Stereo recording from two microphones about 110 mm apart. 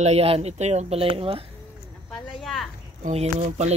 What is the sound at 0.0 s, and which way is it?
Speech, 75° right (ahead or behind).